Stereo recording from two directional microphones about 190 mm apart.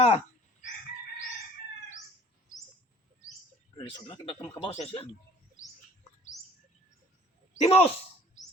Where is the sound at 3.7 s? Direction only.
25° left (ahead or behind).